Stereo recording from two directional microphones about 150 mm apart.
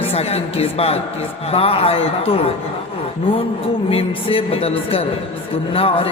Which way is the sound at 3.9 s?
40° left (ahead or behind).